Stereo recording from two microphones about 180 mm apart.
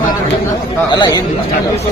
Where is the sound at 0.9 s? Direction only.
20° left (ahead or behind).